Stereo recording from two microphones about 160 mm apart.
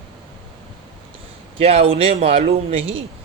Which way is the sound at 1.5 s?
35° right (ahead or behind).